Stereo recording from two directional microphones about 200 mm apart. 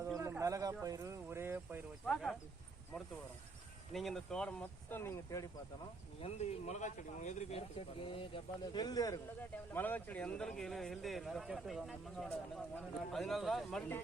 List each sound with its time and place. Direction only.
0.2 s speech: 15° right (ahead or behind)
3.9 s speech: centre (ahead or behind)
6.2 s speech: 35° left (ahead or behind); by 14.0 s 5° left (ahead or behind)